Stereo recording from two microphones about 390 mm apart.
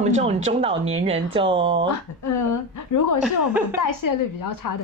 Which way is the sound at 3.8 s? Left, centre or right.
Left.